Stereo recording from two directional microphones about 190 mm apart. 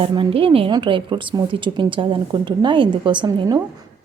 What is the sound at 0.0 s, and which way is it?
A woman's voice, 25° right (ahead or behind).